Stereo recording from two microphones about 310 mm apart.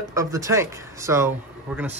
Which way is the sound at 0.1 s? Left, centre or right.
Centre.